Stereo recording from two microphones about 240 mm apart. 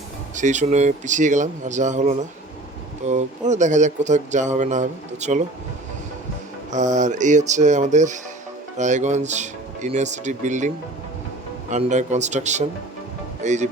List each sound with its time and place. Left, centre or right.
0.3 s speech: right
6.7 s speech: right
11.7 s speech: right